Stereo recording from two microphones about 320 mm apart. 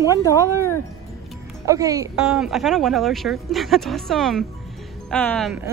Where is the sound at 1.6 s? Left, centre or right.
Centre.